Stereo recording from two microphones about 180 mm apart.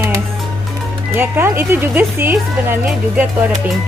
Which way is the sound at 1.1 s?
10° right (ahead or behind).